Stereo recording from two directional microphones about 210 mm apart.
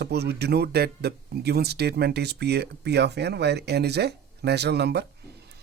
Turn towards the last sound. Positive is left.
turn(degrees=-50)  # may be behind; listen again after turning